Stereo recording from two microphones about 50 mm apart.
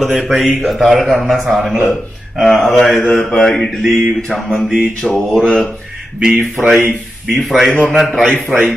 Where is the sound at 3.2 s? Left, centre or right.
Centre.